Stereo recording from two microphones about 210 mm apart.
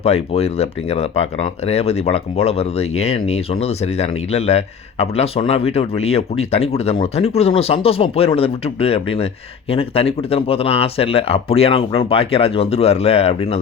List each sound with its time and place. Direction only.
0.0 s speech: 30° left (ahead or behind)